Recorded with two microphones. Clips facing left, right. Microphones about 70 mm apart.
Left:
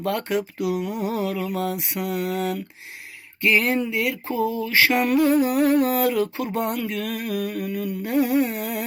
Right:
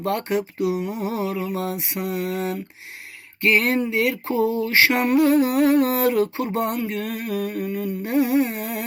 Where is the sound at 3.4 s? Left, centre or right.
Right.